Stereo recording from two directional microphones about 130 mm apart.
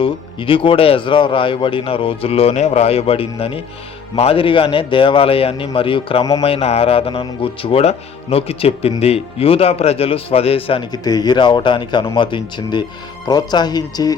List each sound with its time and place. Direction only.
0.0 s a man's voice: 40° left (ahead or behind)
10.9 s speech: 30° left (ahead or behind)